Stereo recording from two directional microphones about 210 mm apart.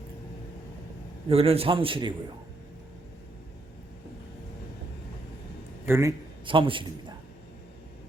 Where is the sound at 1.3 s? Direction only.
25° right (ahead or behind).